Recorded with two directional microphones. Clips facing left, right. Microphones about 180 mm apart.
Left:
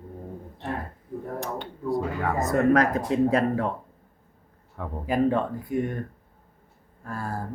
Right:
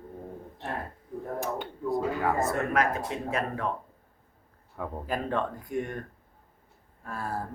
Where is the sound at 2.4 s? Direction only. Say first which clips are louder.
Left 6 dB; 40° left (ahead or behind).